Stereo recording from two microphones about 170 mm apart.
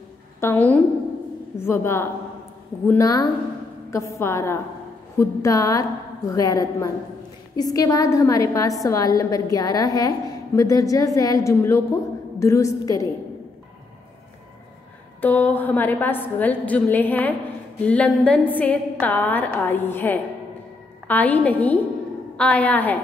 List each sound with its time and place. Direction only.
0.4 s a woman's voice: 10° left (ahead or behind)
15.1 s a woman's voice: 10° left (ahead or behind)